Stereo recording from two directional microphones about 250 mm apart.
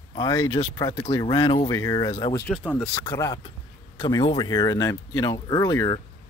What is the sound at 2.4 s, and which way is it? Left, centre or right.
Speech, centre.